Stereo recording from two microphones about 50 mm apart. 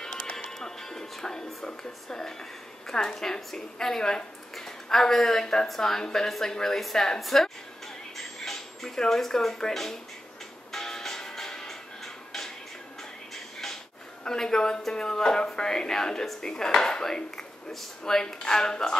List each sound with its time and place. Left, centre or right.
0.0 s music: centre
2.9 s a woman's voice: centre
10.7 s music: centre
14.2 s speech: centre